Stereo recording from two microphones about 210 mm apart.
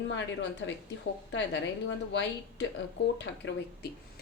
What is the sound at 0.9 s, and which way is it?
Speech, 60° left (ahead or behind).